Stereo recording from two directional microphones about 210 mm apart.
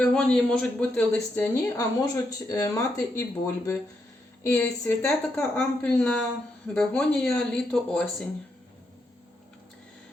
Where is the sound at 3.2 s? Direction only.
15° left (ahead or behind).